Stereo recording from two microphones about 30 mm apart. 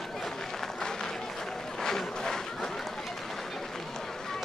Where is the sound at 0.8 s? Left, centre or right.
Left.